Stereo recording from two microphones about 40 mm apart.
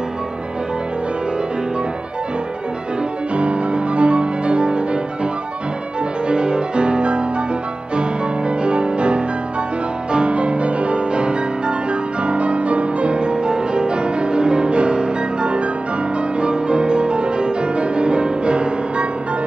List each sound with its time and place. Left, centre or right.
3.3 s music: right
6.2 s music: right